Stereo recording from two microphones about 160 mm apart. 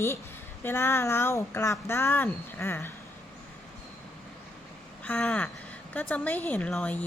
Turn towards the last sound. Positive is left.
turn(degrees=10)  # may be behind; listen again after turning